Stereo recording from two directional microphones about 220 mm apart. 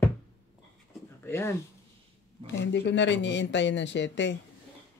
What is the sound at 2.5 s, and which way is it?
Speech, 55° left (ahead or behind).